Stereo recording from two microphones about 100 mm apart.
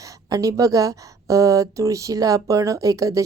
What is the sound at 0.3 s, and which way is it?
A woman's voice, 35° right (ahead or behind).